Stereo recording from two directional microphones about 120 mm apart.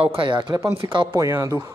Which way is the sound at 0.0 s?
50° right (ahead or behind).